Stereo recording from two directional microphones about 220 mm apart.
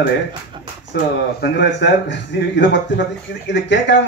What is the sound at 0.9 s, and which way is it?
Speech, 50° left (ahead or behind).